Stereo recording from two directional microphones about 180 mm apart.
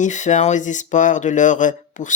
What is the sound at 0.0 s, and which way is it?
Speech, 40° left (ahead or behind).